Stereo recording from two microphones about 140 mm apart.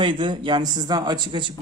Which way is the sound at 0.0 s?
35° right (ahead or behind).